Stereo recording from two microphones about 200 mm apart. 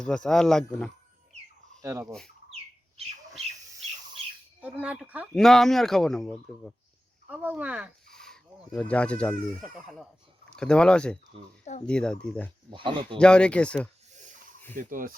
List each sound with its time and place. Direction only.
0.0 s speech: 5° left (ahead or behind)
1.8 s speech: 15° right (ahead or behind)
4.6 s speech: 5° right (ahead or behind)
10.5 s speech: 5° left (ahead or behind)
12.7 s speech: 25° right (ahead or behind)
13.1 s speech: 5° left (ahead or behind)
14.8 s speech: 45° right (ahead or behind)